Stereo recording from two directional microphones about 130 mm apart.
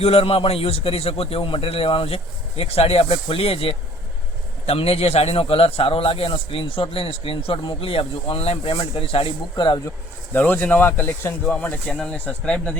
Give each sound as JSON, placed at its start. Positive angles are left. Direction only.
{"t": 0.0, "sound": "a man's voice", "side_deg": 50}
{"t": 10.3, "sound": "speech", "side_deg": 15}